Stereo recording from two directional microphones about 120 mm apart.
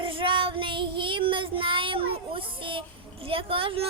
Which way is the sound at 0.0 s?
45° right (ahead or behind).